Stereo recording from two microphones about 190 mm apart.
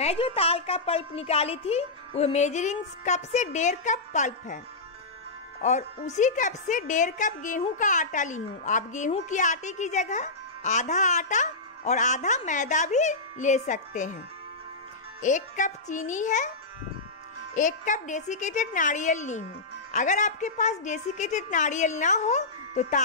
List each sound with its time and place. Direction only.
0.0 s a woman's voice: 30° left (ahead or behind)
5.6 s a woman's voice: 40° left (ahead or behind)
15.2 s a woman's voice: 40° left (ahead or behind)
17.6 s a woman's voice: 40° left (ahead or behind)